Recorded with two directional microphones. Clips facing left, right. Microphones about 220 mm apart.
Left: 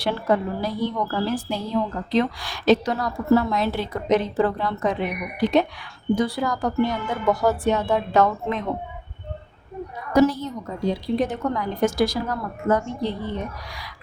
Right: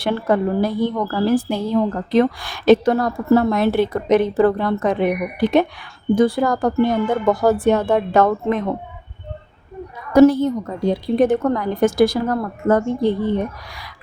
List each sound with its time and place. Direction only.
0.0 s a woman's voice: 55° right (ahead or behind)
10.1 s a woman's voice: 55° right (ahead or behind)